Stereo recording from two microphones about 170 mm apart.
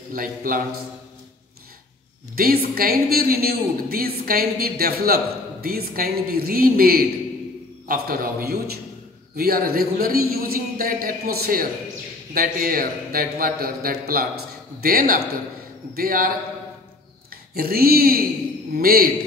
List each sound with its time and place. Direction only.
0.1 s a woman's voice: 55° right (ahead or behind)
2.3 s a woman's voice: 60° right (ahead or behind)
17.6 s a woman's voice: 60° right (ahead or behind)